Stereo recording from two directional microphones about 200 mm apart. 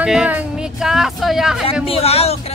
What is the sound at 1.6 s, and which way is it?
Speech, 30° left (ahead or behind).